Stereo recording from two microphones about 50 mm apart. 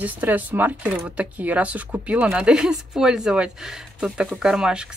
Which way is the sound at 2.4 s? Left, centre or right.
Centre.